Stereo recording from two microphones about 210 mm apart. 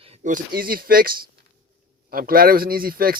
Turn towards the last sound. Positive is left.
turn(degrees=-45)  # may be behind; listen again after turning